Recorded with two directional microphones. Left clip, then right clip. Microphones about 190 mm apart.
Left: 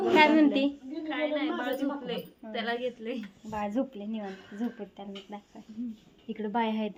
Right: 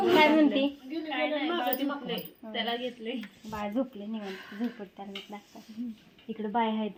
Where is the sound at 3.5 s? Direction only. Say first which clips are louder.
Left 1 dB; centre (ahead or behind).